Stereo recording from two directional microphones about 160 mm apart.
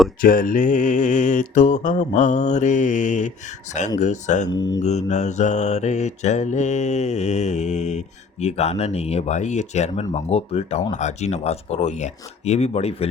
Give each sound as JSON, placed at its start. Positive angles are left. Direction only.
{"t": 0.2, "sound": "mantra", "side_deg": 60}
{"t": 4.4, "sound": "mantra", "side_deg": 25}
{"t": 4.8, "sound": "mantra", "side_deg": 45}